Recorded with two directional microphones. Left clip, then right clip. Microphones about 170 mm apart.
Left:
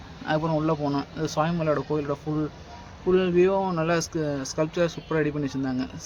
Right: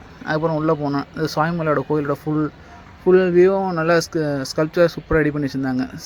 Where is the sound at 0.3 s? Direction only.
20° right (ahead or behind).